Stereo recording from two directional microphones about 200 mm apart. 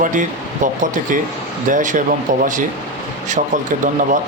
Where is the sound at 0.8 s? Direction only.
40° right (ahead or behind).